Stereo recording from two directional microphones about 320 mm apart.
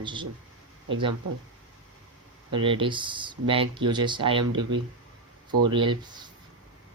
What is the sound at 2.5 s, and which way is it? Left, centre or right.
Speech, centre.